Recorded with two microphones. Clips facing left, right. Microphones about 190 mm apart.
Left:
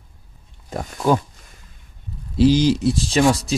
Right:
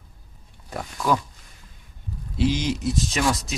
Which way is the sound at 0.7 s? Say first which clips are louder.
Left 5 dB; 25° left (ahead or behind).